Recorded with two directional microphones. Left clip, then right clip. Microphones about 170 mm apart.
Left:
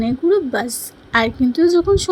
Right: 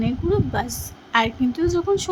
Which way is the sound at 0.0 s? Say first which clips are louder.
Left 6 dB; 20° left (ahead or behind).